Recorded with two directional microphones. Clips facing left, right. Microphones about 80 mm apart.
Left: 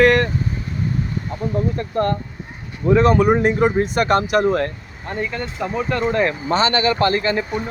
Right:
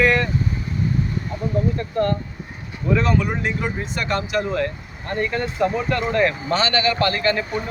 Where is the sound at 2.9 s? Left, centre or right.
Left.